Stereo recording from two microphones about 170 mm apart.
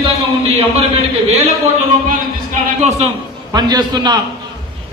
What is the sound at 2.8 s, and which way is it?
Speech, 40° right (ahead or behind).